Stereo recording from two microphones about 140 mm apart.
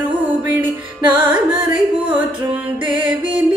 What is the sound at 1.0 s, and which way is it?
Music, 35° right (ahead or behind).